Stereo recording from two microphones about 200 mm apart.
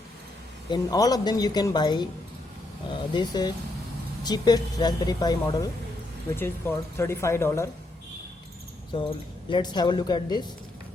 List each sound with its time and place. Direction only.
0.7 s speech: 20° left (ahead or behind)
8.9 s speech: 25° left (ahead or behind)